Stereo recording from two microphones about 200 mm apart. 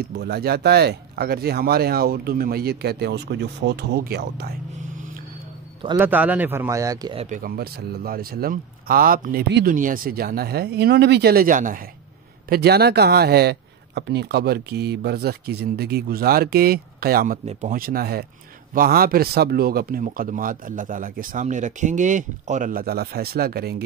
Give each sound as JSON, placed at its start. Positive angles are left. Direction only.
{"t": 0.0, "sound": "speech", "side_deg": -55}
{"t": 5.9, "sound": "speech", "side_deg": -10}
{"t": 7.2, "sound": "speech", "side_deg": -40}
{"t": 12.4, "sound": "speech", "side_deg": -55}